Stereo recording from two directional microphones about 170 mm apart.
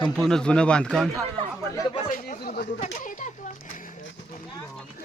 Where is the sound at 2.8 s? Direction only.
50° left (ahead or behind).